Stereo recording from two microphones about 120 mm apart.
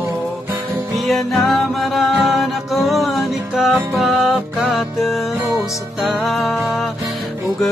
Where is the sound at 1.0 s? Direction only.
Centre (ahead or behind).